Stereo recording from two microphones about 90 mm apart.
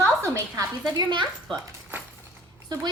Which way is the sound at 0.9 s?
65° right (ahead or behind).